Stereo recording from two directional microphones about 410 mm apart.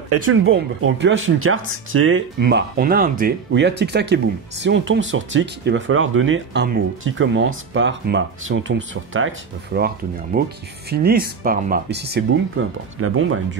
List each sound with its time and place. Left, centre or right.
0.1 s speech: right